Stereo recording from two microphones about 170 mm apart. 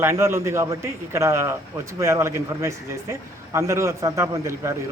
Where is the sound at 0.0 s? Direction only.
15° right (ahead or behind).